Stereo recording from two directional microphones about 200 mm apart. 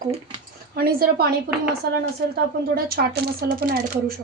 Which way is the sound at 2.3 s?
50° right (ahead or behind).